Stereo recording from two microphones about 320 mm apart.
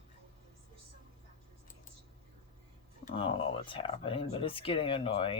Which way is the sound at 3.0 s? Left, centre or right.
Centre.